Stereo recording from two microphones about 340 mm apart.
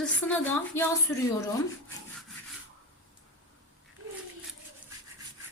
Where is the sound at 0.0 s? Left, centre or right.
Centre.